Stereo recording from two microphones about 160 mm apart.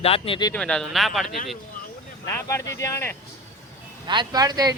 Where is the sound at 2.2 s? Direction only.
15° left (ahead or behind).